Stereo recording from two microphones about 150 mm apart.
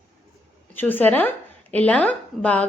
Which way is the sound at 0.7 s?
15° left (ahead or behind).